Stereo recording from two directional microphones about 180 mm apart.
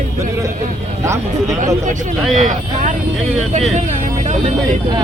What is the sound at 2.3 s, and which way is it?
Speech, 45° right (ahead or behind).